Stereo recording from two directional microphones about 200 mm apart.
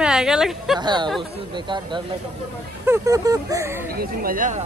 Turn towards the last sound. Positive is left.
turn(degrees=-40)  # may be behind; listen again after turning